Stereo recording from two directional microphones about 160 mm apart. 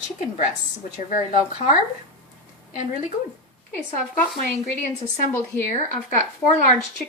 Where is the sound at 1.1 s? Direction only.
50° left (ahead or behind).